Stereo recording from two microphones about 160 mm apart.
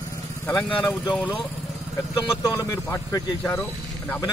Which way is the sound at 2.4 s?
20° left (ahead or behind).